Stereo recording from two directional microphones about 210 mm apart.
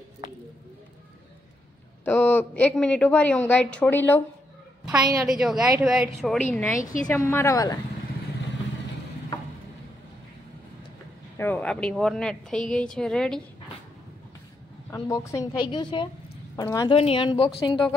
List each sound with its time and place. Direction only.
2.0 s a woman's voice: 10° left (ahead or behind)
4.9 s a woman's voice: 15° right (ahead or behind)
5.2 s a woman's voice: centre (ahead or behind); by 7.8 s 15° left (ahead or behind)
11.3 s speech: 10° left (ahead or behind)
14.9 s a woman's voice: 15° left (ahead or behind)